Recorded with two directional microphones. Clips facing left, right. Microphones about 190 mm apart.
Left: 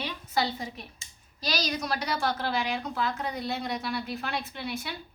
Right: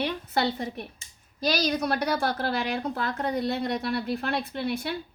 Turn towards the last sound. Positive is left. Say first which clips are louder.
# right 6 dB
turn(degrees=-55)  # may be behind; listen again after turning